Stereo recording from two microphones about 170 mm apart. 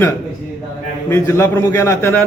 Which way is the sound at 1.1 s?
15° left (ahead or behind).